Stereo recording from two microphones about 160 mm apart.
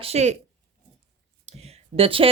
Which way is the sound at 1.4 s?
40° right (ahead or behind).